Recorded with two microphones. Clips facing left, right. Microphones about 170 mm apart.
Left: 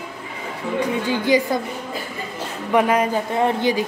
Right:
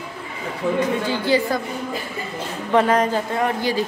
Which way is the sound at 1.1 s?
15° left (ahead or behind).